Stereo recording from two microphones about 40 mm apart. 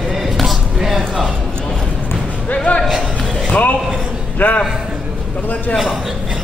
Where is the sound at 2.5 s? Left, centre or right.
Left.